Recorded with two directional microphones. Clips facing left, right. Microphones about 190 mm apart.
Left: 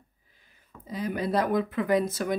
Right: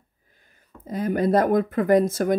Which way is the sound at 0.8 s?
50° right (ahead or behind).